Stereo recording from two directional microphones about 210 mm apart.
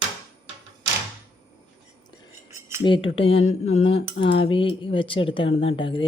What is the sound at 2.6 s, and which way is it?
Cutlery, 10° right (ahead or behind).